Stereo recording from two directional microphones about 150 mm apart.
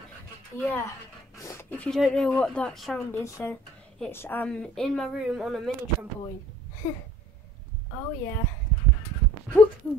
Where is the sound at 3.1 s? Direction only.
20° left (ahead or behind); by 5.7 s centre (ahead or behind).